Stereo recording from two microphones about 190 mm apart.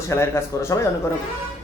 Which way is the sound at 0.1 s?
15° left (ahead or behind).